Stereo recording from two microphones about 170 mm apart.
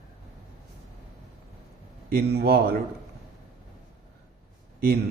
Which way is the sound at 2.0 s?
65° right (ahead or behind).